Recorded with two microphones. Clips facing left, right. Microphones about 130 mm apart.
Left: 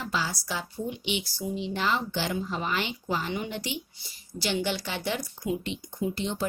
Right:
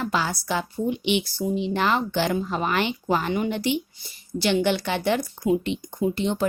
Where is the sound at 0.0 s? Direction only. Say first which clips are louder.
Right 6 dB; 55° right (ahead or behind).